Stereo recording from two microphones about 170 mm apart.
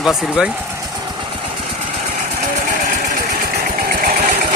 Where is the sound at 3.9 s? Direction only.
60° right (ahead or behind).